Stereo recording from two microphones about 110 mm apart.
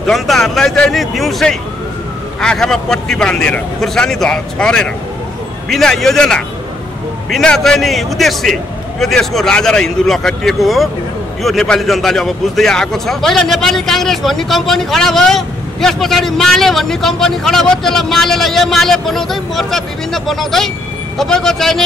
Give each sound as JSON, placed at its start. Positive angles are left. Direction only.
{"t": 0.0, "sound": "a man's voice", "side_deg": 0}